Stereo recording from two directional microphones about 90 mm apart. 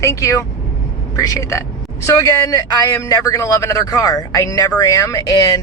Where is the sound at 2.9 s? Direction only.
35° left (ahead or behind).